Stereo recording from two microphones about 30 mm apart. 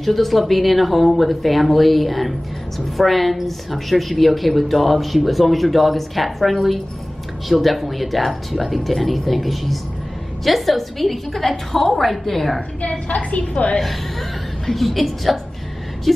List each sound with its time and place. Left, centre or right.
0.0 s speech: centre
13.1 s a woman's voice: left
14.7 s speech: centre